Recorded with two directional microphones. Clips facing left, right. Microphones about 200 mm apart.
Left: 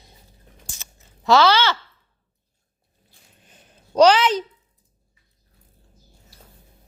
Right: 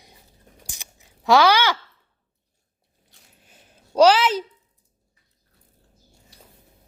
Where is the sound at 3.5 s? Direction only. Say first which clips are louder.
Left 2 dB; 5° right (ahead or behind).